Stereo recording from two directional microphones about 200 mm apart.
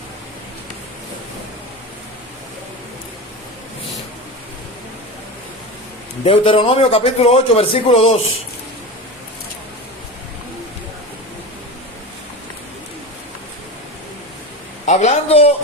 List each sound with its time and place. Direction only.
6.2 s speech: 25° left (ahead or behind)
14.8 s a man's voice: 35° left (ahead or behind)